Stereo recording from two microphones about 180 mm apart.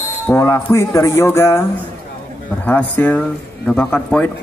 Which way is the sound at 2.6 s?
10° left (ahead or behind).